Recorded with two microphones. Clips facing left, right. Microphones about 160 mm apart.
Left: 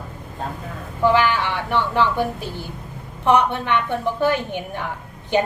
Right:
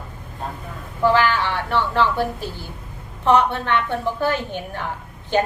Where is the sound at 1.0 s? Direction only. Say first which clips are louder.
Even; 15° left (ahead or behind).